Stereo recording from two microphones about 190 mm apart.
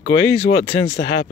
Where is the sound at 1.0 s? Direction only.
45° left (ahead or behind).